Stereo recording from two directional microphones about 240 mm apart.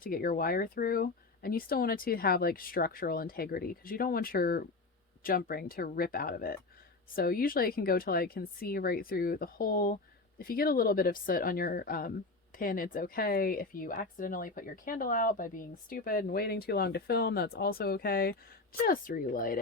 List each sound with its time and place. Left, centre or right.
0.0 s speech: left